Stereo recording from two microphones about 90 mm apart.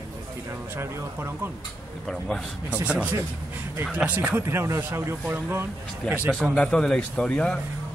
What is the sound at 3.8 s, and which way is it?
Speech, 15° right (ahead or behind).